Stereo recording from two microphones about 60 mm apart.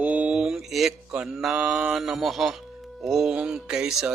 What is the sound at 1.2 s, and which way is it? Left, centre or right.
Music, centre.